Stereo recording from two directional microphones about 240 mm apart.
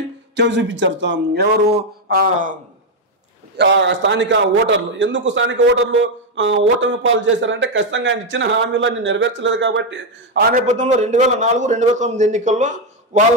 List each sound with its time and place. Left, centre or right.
0.4 s a man's voice: right
3.5 s a man's voice: right
10.5 s a man's voice: right